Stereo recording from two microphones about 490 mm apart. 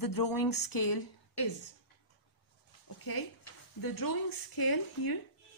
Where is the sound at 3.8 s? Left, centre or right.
Left.